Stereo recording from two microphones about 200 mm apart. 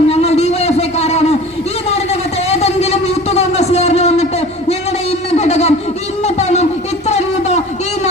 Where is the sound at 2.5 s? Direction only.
30° left (ahead or behind).